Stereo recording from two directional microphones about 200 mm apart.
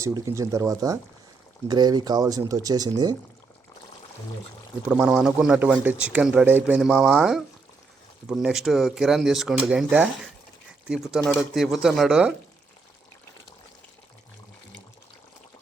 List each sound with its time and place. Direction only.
0.0 s speech: 15° right (ahead or behind)
4.9 s speech: 5° right (ahead or behind)